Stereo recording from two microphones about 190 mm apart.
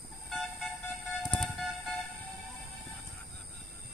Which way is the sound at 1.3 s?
Centre (ahead or behind).